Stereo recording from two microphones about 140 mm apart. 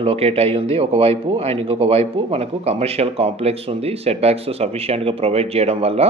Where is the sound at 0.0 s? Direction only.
45° right (ahead or behind).